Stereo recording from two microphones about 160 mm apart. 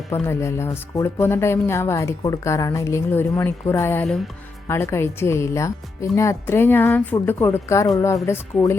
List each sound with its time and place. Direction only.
0.1 s speech: 15° left (ahead or behind)